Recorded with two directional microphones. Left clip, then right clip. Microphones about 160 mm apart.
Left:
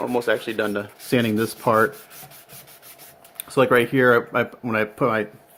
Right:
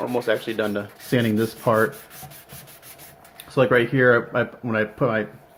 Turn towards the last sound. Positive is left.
turn(degrees=60)  # may be behind; listen again after turning